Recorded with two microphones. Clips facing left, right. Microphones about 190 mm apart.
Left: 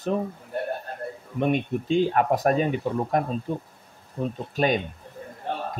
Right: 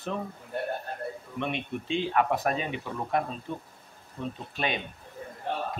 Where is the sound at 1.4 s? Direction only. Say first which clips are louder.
Left 9 dB; 45° left (ahead or behind).